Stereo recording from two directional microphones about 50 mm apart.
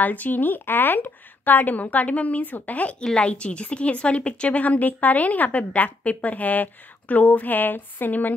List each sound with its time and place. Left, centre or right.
0.0 s a woman's voice: left
3.0 s a woman's voice: centre; by 8.4 s left